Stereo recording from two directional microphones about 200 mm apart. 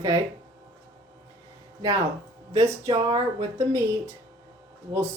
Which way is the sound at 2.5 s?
15° right (ahead or behind).